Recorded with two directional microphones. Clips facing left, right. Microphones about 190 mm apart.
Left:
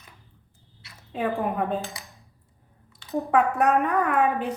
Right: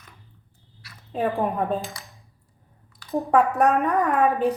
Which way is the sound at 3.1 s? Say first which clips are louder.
Right 2 dB; 40° right (ahead or behind).